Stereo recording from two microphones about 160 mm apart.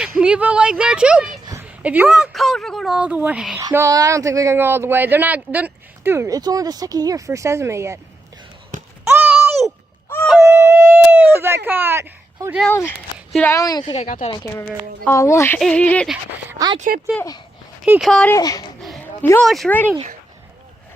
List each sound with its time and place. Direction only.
0.2 s speech: 5° right (ahead or behind)
3.6 s speech: 20° right (ahead or behind)
8.7 s basketball bounce: 55° right (ahead or behind)
9.0 s a sound: 10° right (ahead or behind)
10.4 s a sound: 15° right (ahead or behind)
12.6 s speech: 15° left (ahead or behind)
13.9 s speech: 45° left (ahead or behind)
14.3 s speech: 25° left (ahead or behind)
15.5 s speech: 5° left (ahead or behind)
16.5 s speech: 20° right (ahead or behind)
17.8 s speech: 10° right (ahead or behind)
18.1 s speech: 5° left (ahead or behind)
18.3 s speech: 20° left (ahead or behind)
19.4 s speech: centre (ahead or behind)